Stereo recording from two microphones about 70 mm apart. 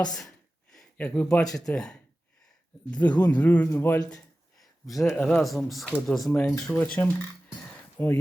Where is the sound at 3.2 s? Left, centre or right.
Centre.